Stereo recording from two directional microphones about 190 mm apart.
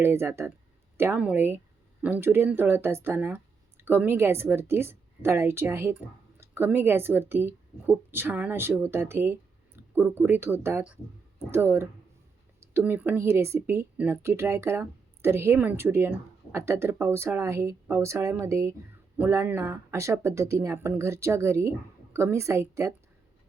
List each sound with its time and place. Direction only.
0.0 s speech: 15° right (ahead or behind)